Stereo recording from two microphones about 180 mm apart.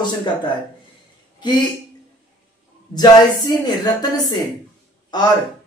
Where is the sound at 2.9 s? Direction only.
20° left (ahead or behind).